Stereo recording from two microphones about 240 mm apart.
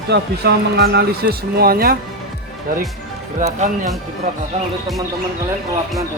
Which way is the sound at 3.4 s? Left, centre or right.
Right.